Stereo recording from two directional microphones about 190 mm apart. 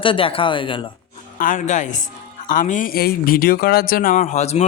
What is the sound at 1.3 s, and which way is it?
Speech, 45° left (ahead or behind).